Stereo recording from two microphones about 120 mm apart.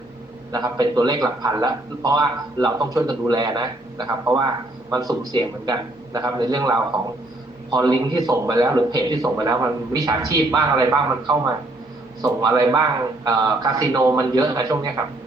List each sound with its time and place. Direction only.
0.5 s a man's voice: 35° right (ahead or behind)